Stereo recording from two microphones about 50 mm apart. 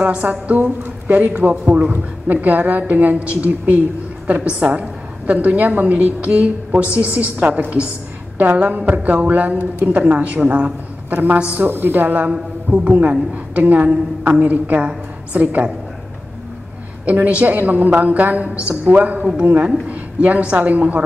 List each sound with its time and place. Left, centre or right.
0.0 s a woman's voice: right
11.6 s a woman's voice: right
12.3 s a man's voice: right
12.8 s a woman's voice: right
17.1 s a woman's voice: right